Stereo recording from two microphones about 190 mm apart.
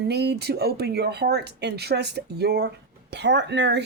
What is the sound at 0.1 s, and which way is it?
Speech, 60° right (ahead or behind).